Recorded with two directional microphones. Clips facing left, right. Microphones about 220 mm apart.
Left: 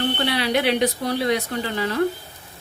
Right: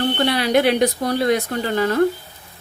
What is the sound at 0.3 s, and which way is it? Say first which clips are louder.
Speech: right 5 dB; 45° right (ahead or behind).